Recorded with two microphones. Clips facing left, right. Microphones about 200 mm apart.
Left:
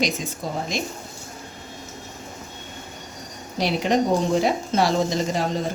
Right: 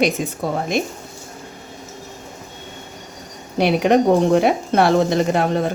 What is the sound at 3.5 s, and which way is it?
Speech, 60° right (ahead or behind).